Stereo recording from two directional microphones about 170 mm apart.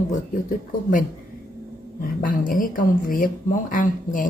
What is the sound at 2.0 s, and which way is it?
Speech, 55° left (ahead or behind).